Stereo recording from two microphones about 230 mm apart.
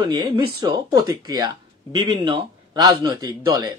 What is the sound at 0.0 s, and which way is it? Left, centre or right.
Speech, centre.